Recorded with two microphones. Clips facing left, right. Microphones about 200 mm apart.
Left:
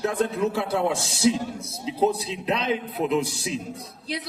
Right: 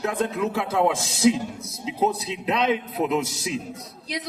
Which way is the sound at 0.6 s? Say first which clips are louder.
Right 2 dB; 90° right.